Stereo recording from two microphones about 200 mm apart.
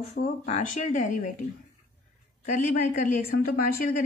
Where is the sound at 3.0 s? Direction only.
45° left (ahead or behind).